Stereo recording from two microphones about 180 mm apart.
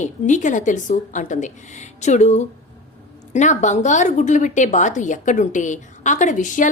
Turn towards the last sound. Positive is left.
turn(degrees=45)  # may be behind; listen again after turning